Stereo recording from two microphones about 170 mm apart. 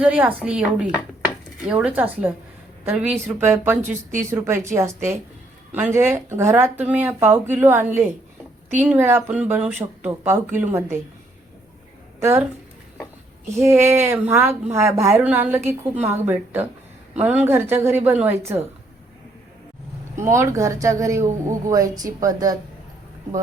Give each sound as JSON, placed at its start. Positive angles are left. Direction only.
{"t": 0.0, "sound": "speech", "side_deg": -10}
{"t": 12.2, "sound": "speech", "side_deg": -15}
{"t": 13.6, "sound": "speech", "side_deg": -15}
{"t": 20.1, "sound": "speech", "side_deg": -15}